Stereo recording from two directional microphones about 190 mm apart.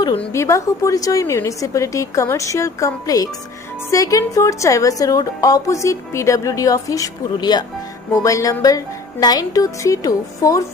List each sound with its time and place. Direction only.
0.2 s a woman's voice: 15° left (ahead or behind)